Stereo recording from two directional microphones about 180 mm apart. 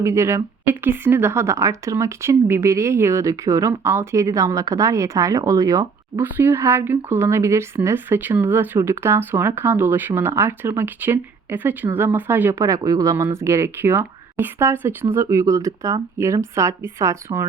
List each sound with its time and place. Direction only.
0.0 s speech: 15° right (ahead or behind)